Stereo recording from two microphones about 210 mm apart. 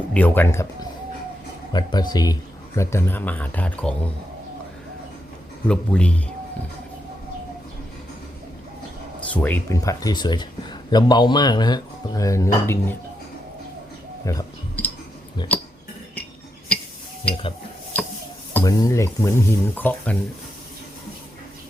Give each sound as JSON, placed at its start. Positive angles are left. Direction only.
{"t": 0.1, "sound": "speech", "side_deg": 5}
{"t": 5.6, "sound": "a man's voice", "side_deg": 5}
{"t": 9.3, "sound": "speech", "side_deg": 10}
{"t": 14.3, "sound": "speech", "side_deg": 15}
{"t": 18.0, "sound": "a sound", "side_deg": 5}
{"t": 18.5, "sound": "speech", "side_deg": 15}